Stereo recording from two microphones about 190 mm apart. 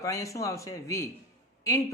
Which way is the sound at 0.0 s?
15° left (ahead or behind).